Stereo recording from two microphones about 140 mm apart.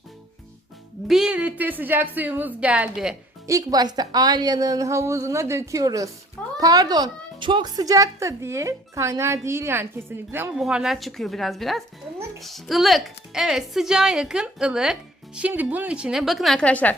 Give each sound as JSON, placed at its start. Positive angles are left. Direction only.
{"t": 1.0, "sound": "a woman's voice", "side_deg": -5}
{"t": 3.4, "sound": "speech", "side_deg": -25}
{"t": 10.5, "sound": "a woman's voice", "side_deg": -5}